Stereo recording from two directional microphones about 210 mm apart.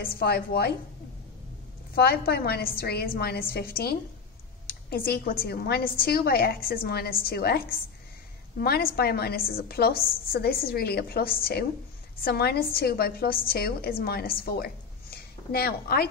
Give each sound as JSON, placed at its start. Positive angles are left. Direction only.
{"t": 0.0, "sound": "a woman's voice", "side_deg": 45}
{"t": 2.0, "sound": "a woman's voice", "side_deg": 45}